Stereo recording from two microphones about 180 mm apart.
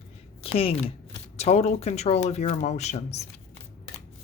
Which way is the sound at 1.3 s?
35° left (ahead or behind).